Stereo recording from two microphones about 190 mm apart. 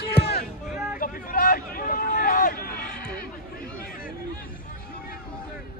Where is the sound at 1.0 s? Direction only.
50° left (ahead or behind).